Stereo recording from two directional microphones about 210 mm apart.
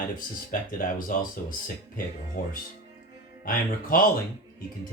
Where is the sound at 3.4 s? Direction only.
40° left (ahead or behind).